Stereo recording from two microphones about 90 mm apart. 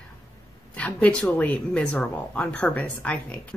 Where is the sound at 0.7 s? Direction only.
15° left (ahead or behind).